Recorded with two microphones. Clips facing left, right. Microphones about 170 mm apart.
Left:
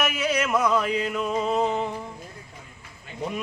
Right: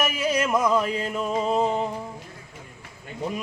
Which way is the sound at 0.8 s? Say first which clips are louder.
Even; 35° right (ahead or behind).